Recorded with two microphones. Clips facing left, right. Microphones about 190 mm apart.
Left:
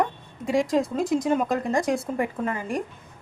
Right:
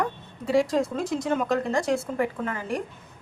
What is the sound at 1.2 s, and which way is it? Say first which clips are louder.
A woman's voice: left 1 dB; 15° left (ahead or behind).